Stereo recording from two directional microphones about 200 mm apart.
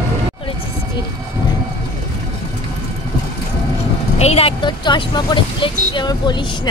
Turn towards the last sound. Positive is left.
turn(degrees=20)  # may be behind; listen again after turning